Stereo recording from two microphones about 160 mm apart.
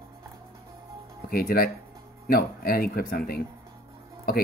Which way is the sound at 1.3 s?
70° left (ahead or behind).